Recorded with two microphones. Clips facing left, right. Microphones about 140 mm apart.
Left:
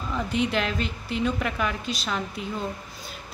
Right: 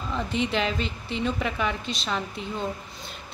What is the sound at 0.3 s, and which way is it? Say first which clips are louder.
A woman's voice: left 1 dB; centre (ahead or behind).